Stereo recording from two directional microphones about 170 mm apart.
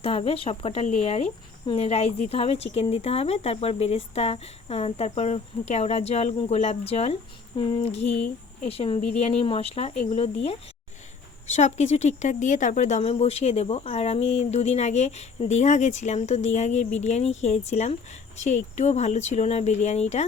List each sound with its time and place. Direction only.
0.0 s speech: 35° left (ahead or behind)